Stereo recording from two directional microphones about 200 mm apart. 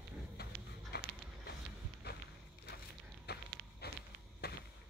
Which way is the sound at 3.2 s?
55° left (ahead or behind).